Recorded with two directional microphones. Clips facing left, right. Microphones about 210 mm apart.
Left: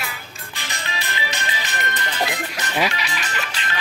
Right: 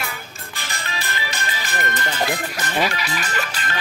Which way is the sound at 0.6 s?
50° right (ahead or behind).